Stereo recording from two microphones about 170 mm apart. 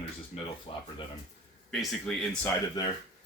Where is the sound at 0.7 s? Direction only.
35° left (ahead or behind).